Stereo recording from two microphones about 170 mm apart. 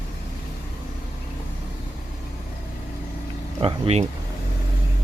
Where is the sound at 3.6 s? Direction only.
35° right (ahead or behind).